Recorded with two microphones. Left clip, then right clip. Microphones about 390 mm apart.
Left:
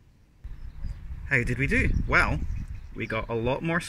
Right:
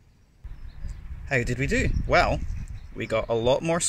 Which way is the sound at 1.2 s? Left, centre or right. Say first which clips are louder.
Even; centre.